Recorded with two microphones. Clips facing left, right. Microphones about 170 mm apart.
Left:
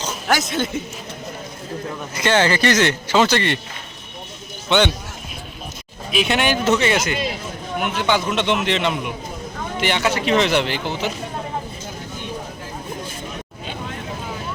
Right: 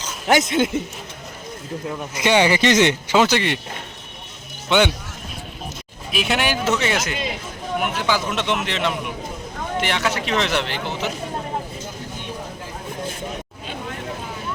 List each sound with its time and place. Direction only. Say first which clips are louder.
0.3 s speech: right 4 dB; 20° right (ahead or behind)
2.1 s speech: right 1 dB; 15° right (ahead or behind)
6.1 s speech: left 2 dB; centre (ahead or behind)